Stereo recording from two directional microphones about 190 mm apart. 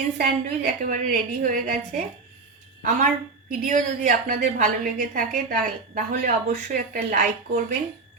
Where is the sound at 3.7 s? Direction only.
45° right (ahead or behind).